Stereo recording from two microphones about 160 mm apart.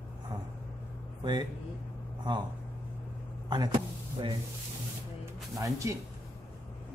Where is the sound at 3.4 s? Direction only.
25° right (ahead or behind).